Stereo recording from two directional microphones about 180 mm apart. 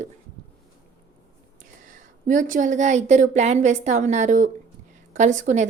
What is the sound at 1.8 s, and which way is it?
A woman's voice, 45° right (ahead or behind).